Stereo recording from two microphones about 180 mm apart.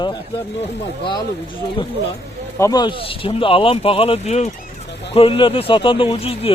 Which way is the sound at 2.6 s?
20° left (ahead or behind).